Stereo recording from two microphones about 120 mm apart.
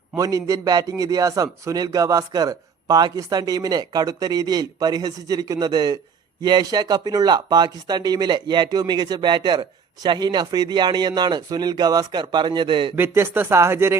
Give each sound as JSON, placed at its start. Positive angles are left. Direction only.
{"t": 0.2, "sound": "speech", "side_deg": -30}
{"t": 13.0, "sound": "speech", "side_deg": -15}